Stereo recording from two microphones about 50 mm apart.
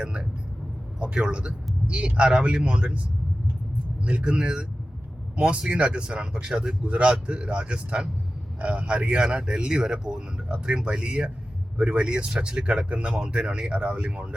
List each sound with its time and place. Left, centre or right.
0.0 s speech: right
4.0 s speech: right
6.8 s speech: right